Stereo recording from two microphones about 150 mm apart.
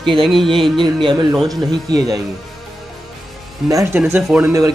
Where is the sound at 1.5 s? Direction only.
25° right (ahead or behind).